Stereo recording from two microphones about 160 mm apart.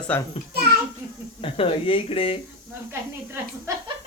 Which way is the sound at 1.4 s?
35° left (ahead or behind).